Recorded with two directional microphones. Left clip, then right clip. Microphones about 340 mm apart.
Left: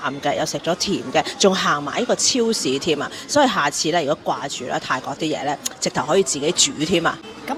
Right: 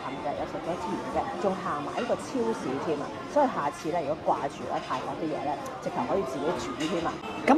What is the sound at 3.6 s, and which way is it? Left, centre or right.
Speech, left.